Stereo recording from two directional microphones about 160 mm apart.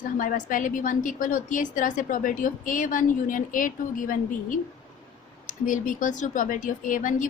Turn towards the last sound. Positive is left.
turn(degrees=55)  # may be behind; listen again after turning